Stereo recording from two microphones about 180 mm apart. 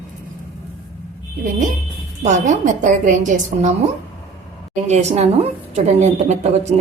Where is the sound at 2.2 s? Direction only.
40° right (ahead or behind).